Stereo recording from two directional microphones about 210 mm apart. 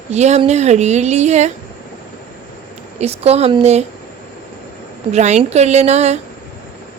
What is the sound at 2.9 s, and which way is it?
Speech, 30° right (ahead or behind).